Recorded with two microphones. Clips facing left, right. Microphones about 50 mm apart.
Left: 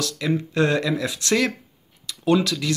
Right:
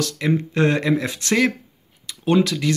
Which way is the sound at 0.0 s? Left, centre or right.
Right.